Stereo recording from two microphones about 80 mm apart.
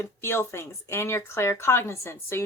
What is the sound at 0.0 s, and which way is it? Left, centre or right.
Speech, left.